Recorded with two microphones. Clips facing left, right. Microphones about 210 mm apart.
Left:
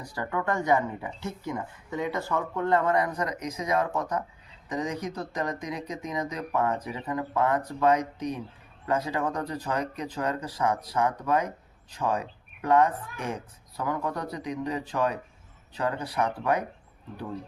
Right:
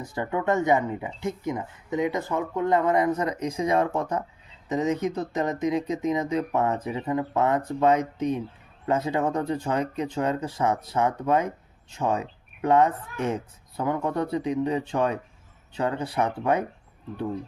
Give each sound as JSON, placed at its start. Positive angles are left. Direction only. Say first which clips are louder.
{"t": 0.1, "sound": "speech", "louder": "right 4 dB", "side_deg": -20}